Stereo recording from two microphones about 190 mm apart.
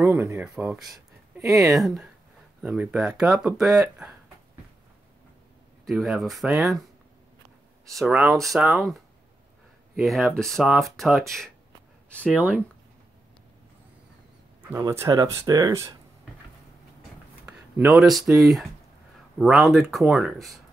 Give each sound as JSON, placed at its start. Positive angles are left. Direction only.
{"t": 0.0, "sound": "speech", "side_deg": -10}
{"t": 1.4, "sound": "speech", "side_deg": -15}
{"t": 1.7, "sound": "speech", "side_deg": 0}
{"t": 5.9, "sound": "speech", "side_deg": 0}
{"t": 7.9, "sound": "speech", "side_deg": 0}
{"t": 9.9, "sound": "speech", "side_deg": 0}
{"t": 12.4, "sound": "speech", "side_deg": -10}
{"t": 14.6, "sound": "speech", "side_deg": -15}
{"t": 17.5, "sound": "speech", "side_deg": -5}